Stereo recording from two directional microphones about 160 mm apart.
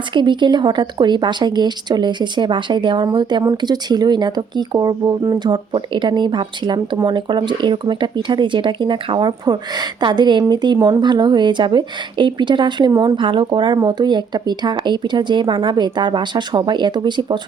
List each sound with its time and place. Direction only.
0.1 s speech: 30° right (ahead or behind)